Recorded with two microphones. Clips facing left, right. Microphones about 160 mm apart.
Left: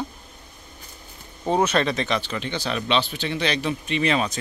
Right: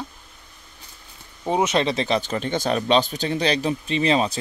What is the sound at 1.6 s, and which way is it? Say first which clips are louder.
Speech: right 1 dB; 25° right (ahead or behind).